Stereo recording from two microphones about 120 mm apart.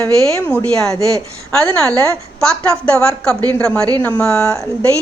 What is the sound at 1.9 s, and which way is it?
Speech, 25° right (ahead or behind).